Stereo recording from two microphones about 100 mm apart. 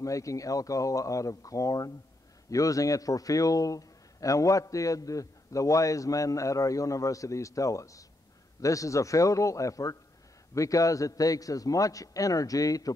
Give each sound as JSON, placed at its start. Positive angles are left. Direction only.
{"t": 0.0, "sound": "a man's voice", "side_deg": 35}